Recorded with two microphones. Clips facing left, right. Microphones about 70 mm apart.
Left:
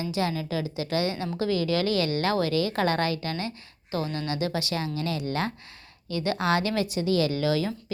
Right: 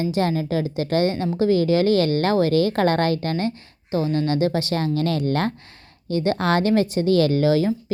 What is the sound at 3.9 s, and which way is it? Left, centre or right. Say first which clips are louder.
A woman's voice: right 8 dB; right.